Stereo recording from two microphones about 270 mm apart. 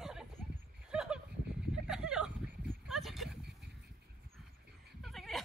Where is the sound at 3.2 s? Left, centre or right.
Right.